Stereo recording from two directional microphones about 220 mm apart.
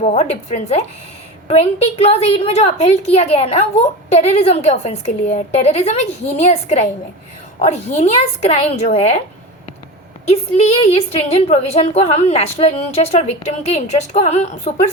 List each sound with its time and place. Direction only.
0.0 s a woman's voice: 35° left (ahead or behind)
10.2 s a woman's voice: 30° left (ahead or behind)